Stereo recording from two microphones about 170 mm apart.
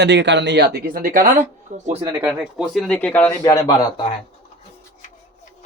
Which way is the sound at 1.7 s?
45° right (ahead or behind).